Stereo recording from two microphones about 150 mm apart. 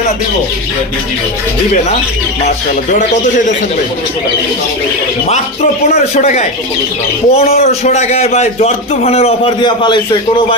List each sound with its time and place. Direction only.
6.1 s a man's voice: 50° left (ahead or behind); by 10.0 s 30° left (ahead or behind)